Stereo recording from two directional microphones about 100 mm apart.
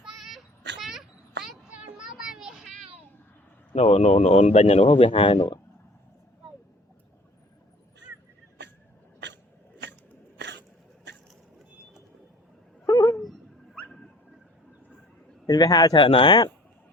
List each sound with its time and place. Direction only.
0.0 s child singing: centre (ahead or behind)
1.5 s children playing: 10° right (ahead or behind)
3.8 s speech: 90° left; by 5.5 s 65° left (ahead or behind)
12.8 s a sound: 35° left (ahead or behind)
13.7 s a sound: 10° left (ahead or behind)
15.4 s a man's voice: 40° left (ahead or behind)
16.0 s speech: 60° left (ahead or behind)